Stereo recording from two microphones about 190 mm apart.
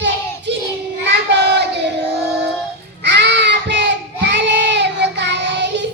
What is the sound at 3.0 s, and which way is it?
Child singing, 65° right (ahead or behind).